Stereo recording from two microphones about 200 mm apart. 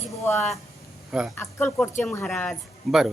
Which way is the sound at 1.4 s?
10° left (ahead or behind).